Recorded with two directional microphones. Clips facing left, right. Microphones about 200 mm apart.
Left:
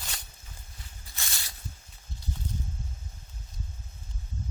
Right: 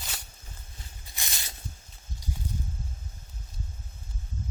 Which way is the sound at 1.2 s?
20° right (ahead or behind).